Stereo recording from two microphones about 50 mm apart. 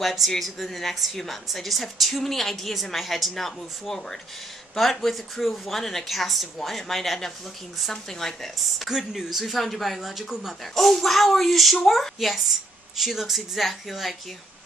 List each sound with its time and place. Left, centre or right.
0.0 s speech: centre
8.8 s speech: centre